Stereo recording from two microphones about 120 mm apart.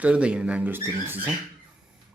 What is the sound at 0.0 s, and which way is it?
Speech, 10° right (ahead or behind).